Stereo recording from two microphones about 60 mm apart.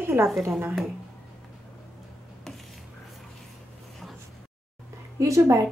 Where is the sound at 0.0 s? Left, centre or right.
Right.